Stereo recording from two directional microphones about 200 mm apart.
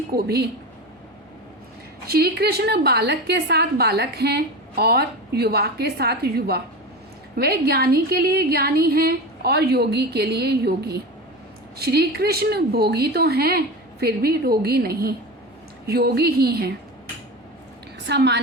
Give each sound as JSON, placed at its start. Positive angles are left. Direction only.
{"t": 0.1, "sound": "a woman's voice", "side_deg": -55}
{"t": 2.0, "sound": "a woman's voice", "side_deg": -50}
{"t": 18.0, "sound": "a woman's voice", "side_deg": -55}